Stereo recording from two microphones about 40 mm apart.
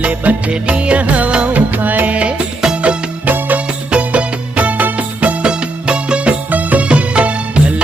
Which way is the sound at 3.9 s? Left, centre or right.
Right.